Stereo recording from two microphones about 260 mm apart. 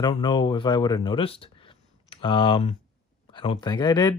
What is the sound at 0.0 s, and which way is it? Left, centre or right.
Speech, centre.